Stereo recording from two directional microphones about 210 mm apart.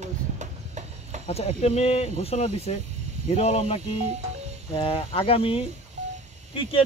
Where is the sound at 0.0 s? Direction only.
35° right (ahead or behind).